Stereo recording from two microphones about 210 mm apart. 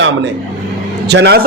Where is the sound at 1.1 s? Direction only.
50° right (ahead or behind).